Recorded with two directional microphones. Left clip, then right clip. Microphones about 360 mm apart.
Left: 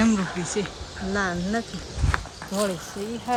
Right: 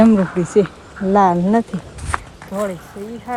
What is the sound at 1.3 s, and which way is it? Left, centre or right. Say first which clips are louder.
Speech: right 11 dB; right.